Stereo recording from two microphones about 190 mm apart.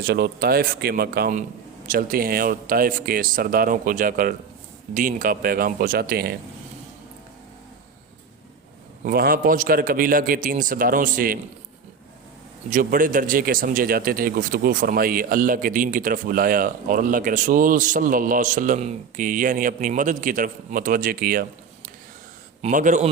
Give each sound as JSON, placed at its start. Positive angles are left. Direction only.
{"t": 0.0, "sound": "speech", "side_deg": -55}
{"t": 9.0, "sound": "speech", "side_deg": -50}
{"t": 12.7, "sound": "speech", "side_deg": -45}
{"t": 22.6, "sound": "a man's voice", "side_deg": -40}